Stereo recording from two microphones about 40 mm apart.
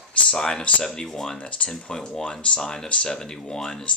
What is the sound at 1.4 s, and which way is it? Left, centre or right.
Speech, left.